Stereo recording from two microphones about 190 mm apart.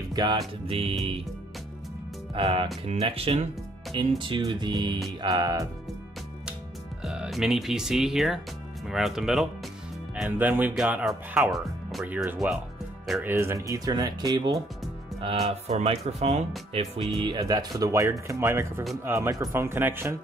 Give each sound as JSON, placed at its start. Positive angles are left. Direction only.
{"t": 0.1, "sound": "music", "side_deg": -20}
{"t": 0.7, "sound": "speech", "side_deg": -30}
{"t": 2.3, "sound": "speech", "side_deg": -25}
{"t": 7.0, "sound": "speech", "side_deg": -5}
{"t": 13.3, "sound": "speech", "side_deg": -15}
{"t": 15.1, "sound": "speech", "side_deg": -30}
{"t": 17.1, "sound": "speech", "side_deg": -25}